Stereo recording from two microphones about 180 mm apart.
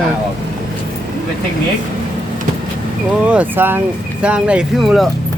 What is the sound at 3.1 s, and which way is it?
Speech, 5° right (ahead or behind).